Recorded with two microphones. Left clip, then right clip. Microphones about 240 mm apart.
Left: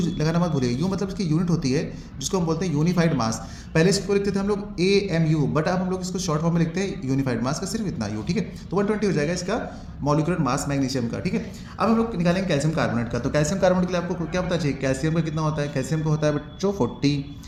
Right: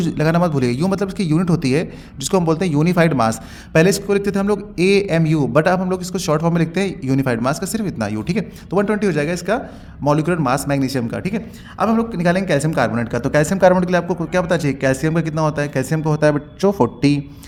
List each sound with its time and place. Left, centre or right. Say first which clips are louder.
0.2 s a man's voice: right 9 dB; right